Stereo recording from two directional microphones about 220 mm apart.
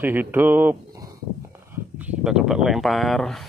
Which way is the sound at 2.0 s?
5° right (ahead or behind).